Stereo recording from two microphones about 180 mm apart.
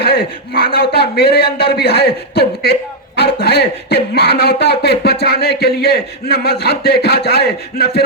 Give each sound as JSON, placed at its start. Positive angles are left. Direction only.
{"t": 0.0, "sound": "a man's voice", "side_deg": 60}